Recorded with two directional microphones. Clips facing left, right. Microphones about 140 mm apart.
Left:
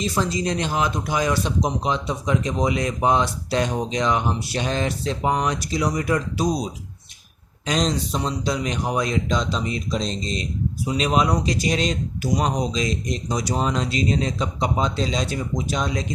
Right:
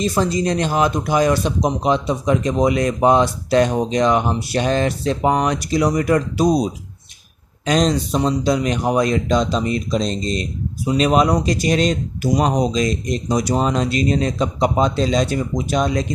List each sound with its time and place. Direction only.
0.0 s speech: 45° right (ahead or behind)
7.6 s speech: 55° right (ahead or behind)